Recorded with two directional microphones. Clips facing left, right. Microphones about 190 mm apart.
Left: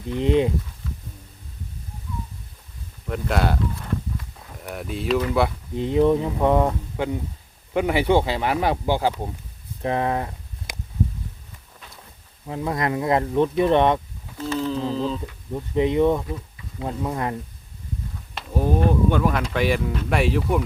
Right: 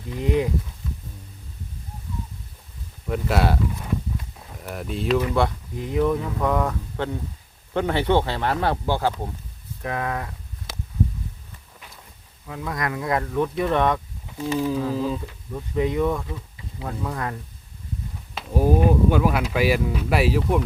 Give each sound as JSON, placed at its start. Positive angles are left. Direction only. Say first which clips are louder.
{"t": 0.2, "sound": "speech", "louder": "left 3 dB", "side_deg": 25}
{"t": 3.1, "sound": "speech", "louder": "right 1 dB", "side_deg": 0}
{"t": 5.7, "sound": "speech", "louder": "left 5 dB", "side_deg": 25}
{"t": 6.9, "sound": "speech", "louder": "left 2 dB", "side_deg": 10}
{"t": 9.8, "sound": "speech", "louder": "left 4 dB", "side_deg": 30}
{"t": 12.5, "sound": "speech", "louder": "left 4 dB", "side_deg": 30}
{"t": 14.3, "sound": "a sound", "louder": "right 1 dB", "side_deg": -15}
{"t": 15.5, "sound": "speech", "louder": "left 3 dB", "side_deg": 20}
{"t": 18.3, "sound": "speech", "louder": "right 2 dB", "side_deg": -5}